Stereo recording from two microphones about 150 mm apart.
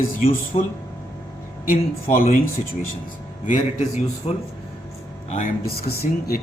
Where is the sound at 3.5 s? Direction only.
50° left (ahead or behind).